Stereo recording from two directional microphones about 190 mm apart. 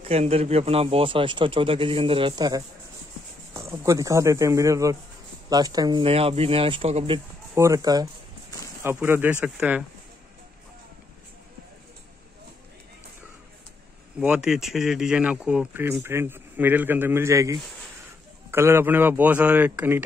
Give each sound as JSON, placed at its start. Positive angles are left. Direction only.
{"t": 0.0, "sound": "speech", "side_deg": -30}
{"t": 7.5, "sound": "speech", "side_deg": -15}
{"t": 14.2, "sound": "speech", "side_deg": -5}